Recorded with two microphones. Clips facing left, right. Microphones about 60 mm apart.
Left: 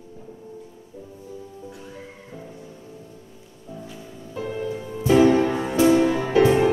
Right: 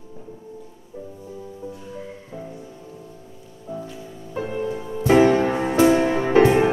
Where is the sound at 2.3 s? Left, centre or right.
Centre.